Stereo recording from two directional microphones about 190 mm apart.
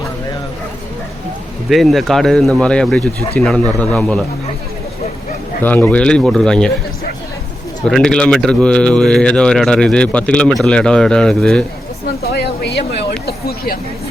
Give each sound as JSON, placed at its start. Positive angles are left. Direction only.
{"t": 1.7, "sound": "speech", "side_deg": 0}
{"t": 5.6, "sound": "speech", "side_deg": 10}
{"t": 7.9, "sound": "speech", "side_deg": 5}
{"t": 12.2, "sound": "a sound", "side_deg": 60}